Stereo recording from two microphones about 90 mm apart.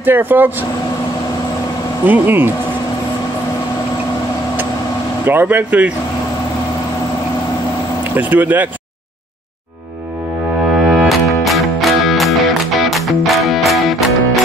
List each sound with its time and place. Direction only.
0.0 s speech: 20° right (ahead or behind)
2.0 s speech: 20° right (ahead or behind)
5.2 s speech: 25° right (ahead or behind)
8.2 s speech: 20° right (ahead or behind)
10.8 s music: 5° right (ahead or behind)